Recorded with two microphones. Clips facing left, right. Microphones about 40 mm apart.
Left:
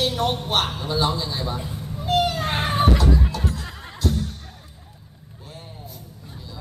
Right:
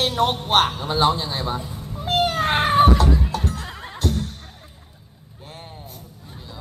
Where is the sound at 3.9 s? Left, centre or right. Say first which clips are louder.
Even; right.